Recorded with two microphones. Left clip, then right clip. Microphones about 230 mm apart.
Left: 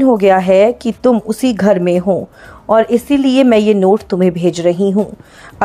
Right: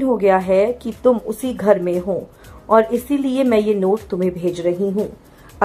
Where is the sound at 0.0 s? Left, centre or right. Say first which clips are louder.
Left 6 dB; left.